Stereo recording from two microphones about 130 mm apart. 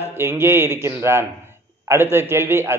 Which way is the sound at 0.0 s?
20° right (ahead or behind).